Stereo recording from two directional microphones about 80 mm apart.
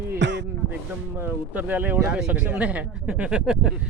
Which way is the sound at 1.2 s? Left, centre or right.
Right.